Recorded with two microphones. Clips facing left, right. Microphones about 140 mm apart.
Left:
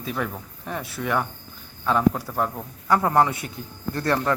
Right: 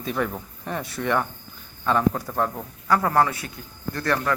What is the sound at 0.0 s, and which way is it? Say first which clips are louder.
A man's voice: right 2 dB; centre (ahead or behind).